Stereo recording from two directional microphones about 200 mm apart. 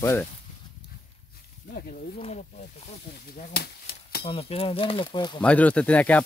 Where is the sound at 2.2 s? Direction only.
30° left (ahead or behind).